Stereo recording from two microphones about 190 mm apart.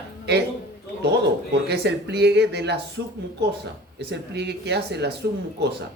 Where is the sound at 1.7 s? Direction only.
60° right (ahead or behind).